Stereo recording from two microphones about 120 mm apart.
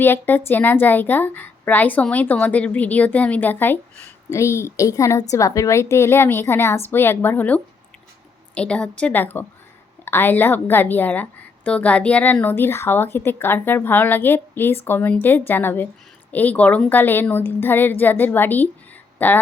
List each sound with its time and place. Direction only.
0.0 s a woman's voice: 15° left (ahead or behind)